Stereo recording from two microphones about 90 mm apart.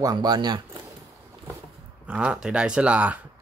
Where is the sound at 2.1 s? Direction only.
10° right (ahead or behind).